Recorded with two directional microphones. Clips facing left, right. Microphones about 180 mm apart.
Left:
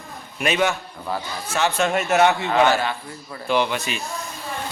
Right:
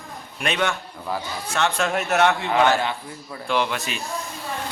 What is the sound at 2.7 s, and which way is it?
Speech, 20° right (ahead or behind).